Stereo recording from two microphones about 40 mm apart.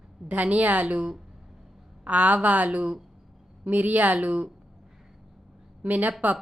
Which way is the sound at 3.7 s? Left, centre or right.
Right.